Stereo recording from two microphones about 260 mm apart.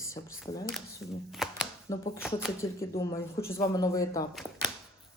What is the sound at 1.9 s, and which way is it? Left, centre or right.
Speech, centre.